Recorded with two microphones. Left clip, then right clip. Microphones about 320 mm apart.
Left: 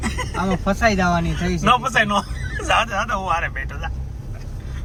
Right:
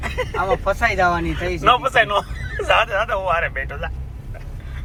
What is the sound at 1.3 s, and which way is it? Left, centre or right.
Speech, centre.